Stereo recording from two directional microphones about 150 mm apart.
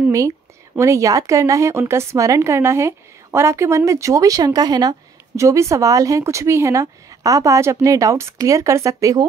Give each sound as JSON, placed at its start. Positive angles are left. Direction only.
{"t": 0.7, "sound": "a woman's voice", "side_deg": -20}